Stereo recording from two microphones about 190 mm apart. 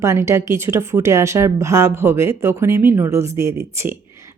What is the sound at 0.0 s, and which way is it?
Speech, 15° right (ahead or behind).